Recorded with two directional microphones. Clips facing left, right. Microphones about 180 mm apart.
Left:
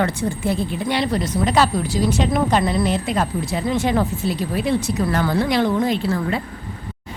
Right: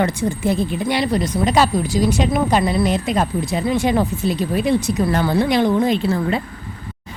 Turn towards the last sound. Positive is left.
turn(degrees=-20)  # may be behind; listen again after turning